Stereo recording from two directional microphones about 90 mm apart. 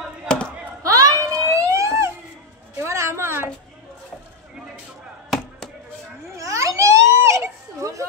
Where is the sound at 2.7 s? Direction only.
30° right (ahead or behind).